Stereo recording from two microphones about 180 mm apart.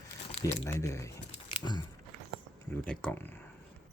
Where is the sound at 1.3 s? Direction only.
25° left (ahead or behind).